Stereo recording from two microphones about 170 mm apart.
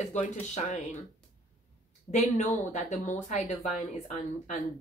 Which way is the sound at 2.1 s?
45° left (ahead or behind).